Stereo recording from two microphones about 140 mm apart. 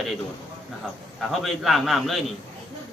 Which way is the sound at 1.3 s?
Centre (ahead or behind).